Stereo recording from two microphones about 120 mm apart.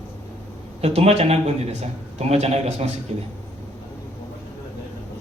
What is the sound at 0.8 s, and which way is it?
A man's voice, 60° right (ahead or behind).